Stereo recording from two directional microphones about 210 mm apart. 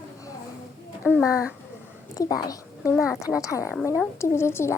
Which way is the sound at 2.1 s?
15° left (ahead or behind).